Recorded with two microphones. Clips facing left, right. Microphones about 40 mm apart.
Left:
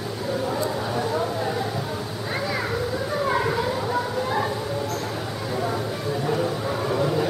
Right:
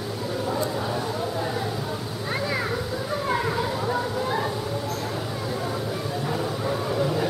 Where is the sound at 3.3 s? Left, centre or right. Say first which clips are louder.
Left 1 dB; centre.